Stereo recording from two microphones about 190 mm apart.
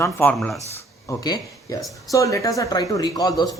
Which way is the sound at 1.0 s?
20° left (ahead or behind).